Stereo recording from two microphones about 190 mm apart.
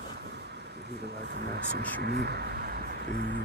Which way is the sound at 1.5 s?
55° right (ahead or behind).